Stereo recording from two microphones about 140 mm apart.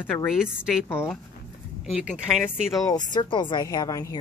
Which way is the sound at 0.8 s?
15° left (ahead or behind).